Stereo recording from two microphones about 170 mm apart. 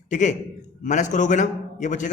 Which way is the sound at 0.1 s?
45° left (ahead or behind).